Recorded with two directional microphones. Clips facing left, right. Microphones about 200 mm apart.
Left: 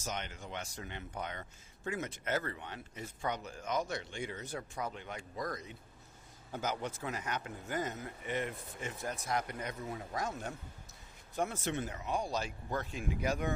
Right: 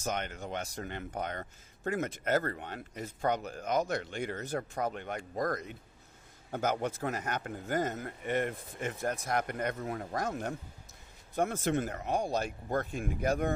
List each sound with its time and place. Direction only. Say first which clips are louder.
0.0 s speech: right 6 dB; 55° right (ahead or behind)